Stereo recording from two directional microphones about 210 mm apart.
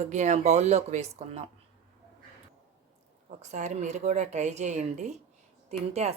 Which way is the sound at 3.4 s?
35° right (ahead or behind).